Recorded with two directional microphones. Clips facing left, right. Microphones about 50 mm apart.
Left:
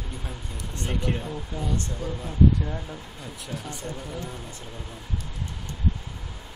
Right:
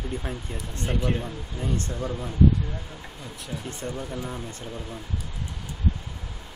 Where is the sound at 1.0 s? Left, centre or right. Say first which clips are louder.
Right 1 dB; centre.